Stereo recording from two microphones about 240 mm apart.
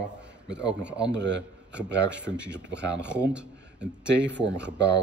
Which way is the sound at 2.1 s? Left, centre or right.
Centre.